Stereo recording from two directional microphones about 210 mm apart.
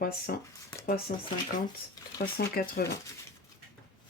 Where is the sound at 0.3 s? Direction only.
45° left (ahead or behind).